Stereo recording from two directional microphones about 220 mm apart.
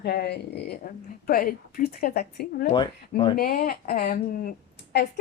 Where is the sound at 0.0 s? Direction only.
45° left (ahead or behind).